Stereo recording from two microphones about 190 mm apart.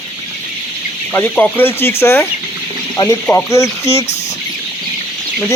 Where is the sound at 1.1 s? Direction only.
10° left (ahead or behind).